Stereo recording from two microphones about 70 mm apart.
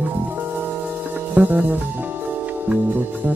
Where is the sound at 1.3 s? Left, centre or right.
Right.